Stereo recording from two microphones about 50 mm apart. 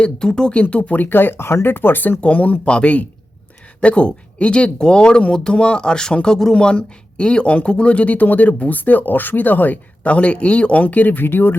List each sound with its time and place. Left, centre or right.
0.0 s speech: centre
0.6 s speech: left
1.0 s speech: left